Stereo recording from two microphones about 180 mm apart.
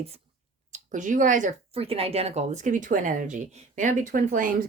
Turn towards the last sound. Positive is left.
turn(degrees=-50)  # may be behind; listen again after turning